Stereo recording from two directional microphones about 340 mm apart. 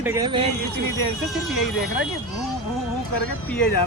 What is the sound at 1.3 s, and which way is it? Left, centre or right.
Speech, centre.